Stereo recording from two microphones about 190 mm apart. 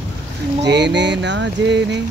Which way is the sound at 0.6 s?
65° right (ahead or behind).